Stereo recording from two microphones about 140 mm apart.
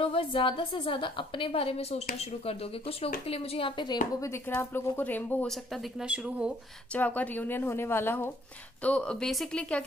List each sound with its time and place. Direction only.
0.0 s a woman's voice: 40° left (ahead or behind)
4.2 s a woman's voice: 15° left (ahead or behind)
5.5 s speech: centre (ahead or behind)
6.9 s a woman's voice: 10° left (ahead or behind)